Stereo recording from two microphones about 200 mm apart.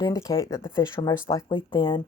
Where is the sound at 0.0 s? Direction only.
15° left (ahead or behind).